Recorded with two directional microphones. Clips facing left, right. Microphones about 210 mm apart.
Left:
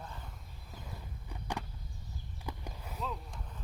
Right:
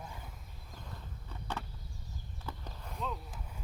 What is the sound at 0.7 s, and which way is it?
Walk, 10° left (ahead or behind).